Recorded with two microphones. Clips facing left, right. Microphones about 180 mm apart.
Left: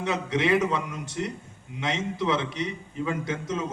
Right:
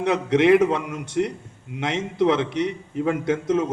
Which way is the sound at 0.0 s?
65° right (ahead or behind).